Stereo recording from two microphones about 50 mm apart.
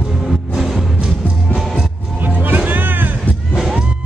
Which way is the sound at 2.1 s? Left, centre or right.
Right.